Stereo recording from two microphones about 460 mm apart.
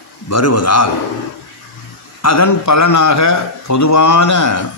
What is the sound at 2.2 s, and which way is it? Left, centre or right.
Speech, left.